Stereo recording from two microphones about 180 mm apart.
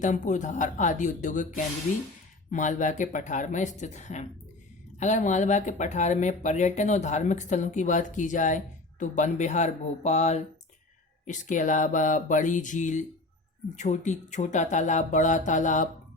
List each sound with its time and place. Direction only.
0.0 s speech: 45° left (ahead or behind)